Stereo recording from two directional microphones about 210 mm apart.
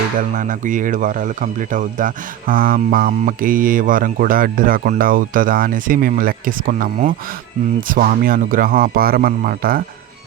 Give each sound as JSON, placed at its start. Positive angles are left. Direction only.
{"t": 0.3, "sound": "speech", "side_deg": -40}